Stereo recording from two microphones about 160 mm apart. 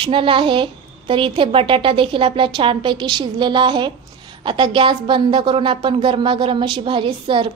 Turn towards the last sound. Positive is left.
turn(degrees=-30)  # may be behind; listen again after turning